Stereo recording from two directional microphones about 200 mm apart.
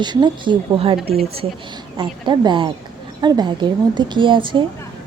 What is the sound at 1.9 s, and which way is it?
A woman's voice, 25° right (ahead or behind).